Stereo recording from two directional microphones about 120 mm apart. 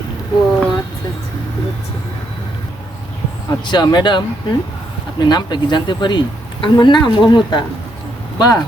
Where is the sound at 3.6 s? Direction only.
40° left (ahead or behind).